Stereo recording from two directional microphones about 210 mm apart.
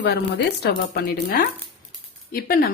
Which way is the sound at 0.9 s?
45° left (ahead or behind).